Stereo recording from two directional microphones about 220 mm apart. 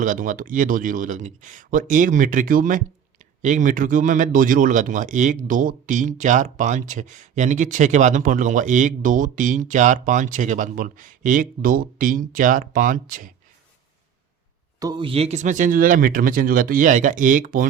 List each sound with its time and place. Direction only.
0.0 s speech: 35° right (ahead or behind)
14.8 s speech: 20° right (ahead or behind); by 17.7 s 40° right (ahead or behind)